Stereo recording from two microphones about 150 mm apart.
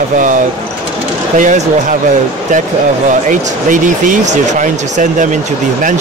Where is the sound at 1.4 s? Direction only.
60° right (ahead or behind).